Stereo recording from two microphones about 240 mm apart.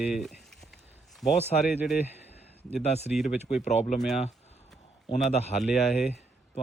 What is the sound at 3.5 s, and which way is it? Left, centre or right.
Speech, left.